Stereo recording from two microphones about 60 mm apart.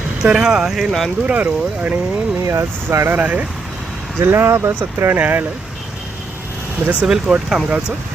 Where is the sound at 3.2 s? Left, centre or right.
Right.